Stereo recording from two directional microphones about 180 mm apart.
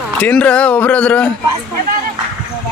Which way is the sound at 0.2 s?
5° left (ahead or behind).